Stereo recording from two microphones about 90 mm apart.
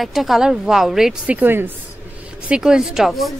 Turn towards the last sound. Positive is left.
turn(degrees=0)  # may be behind; listen again after turning